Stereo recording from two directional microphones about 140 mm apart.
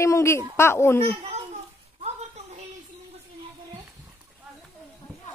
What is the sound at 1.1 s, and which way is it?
Speech, 50° right (ahead or behind).